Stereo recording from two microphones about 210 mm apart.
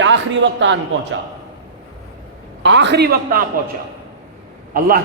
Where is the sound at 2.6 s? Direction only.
60° right (ahead or behind).